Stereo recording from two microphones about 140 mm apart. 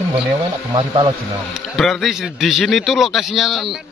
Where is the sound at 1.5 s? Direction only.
Centre (ahead or behind).